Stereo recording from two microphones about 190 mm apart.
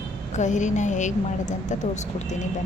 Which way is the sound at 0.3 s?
40° left (ahead or behind).